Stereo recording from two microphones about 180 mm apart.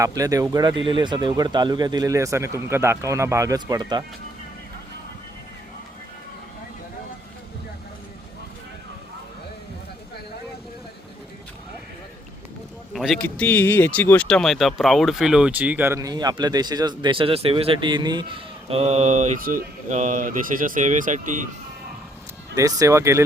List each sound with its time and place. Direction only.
0.0 s speech: 20° right (ahead or behind)
12.9 s speech: centre (ahead or behind); by 21.4 s 45° right (ahead or behind)
22.5 s speech: 20° right (ahead or behind)